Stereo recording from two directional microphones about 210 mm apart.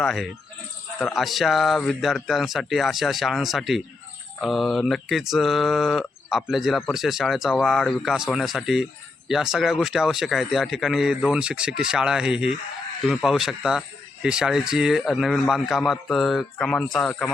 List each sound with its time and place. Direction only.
0.0 s speech: centre (ahead or behind)